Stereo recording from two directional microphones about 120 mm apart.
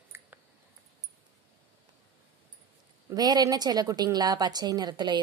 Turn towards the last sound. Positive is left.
turn(degrees=-35)  # may be behind; listen again after turning